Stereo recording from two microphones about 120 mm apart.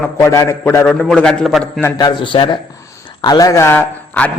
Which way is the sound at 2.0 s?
40° left (ahead or behind).